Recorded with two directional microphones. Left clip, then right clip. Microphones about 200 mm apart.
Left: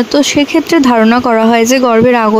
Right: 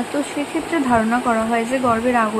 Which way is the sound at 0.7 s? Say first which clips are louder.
Left 8 dB; 45° left (ahead or behind).